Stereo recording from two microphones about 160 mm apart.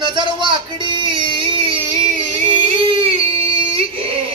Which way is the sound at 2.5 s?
30° right (ahead or behind).